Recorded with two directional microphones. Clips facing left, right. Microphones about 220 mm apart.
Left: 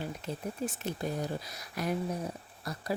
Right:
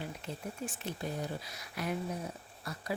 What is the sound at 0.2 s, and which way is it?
Speech, 40° left (ahead or behind).